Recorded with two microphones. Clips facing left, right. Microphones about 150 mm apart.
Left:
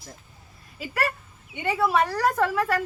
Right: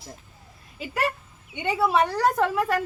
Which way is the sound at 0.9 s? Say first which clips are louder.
Right 1 dB; 20° right (ahead or behind).